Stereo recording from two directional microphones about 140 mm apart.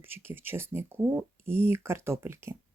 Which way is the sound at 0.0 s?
15° right (ahead or behind).